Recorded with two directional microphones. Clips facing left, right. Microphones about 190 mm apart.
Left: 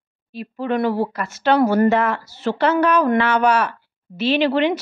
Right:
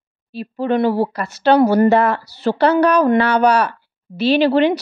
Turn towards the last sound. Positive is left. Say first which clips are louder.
# right 4 dB
turn(degrees=-35)  # may be behind; listen again after turning